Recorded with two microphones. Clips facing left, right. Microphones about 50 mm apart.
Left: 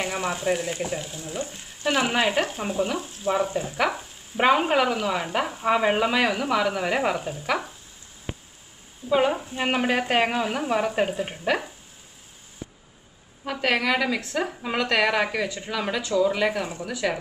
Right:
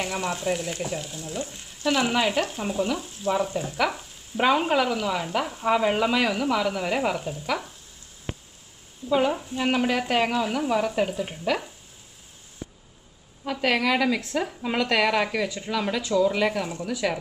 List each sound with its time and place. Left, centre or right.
0.0 s frying: centre
4.4 s frying: centre
5.8 s speech: centre
7.4 s frying: centre
9.1 s frying: centre
9.6 s speech: left
13.5 s frying: centre